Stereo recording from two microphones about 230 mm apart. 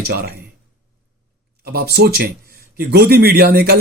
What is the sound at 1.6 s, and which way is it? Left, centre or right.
A man's voice, right.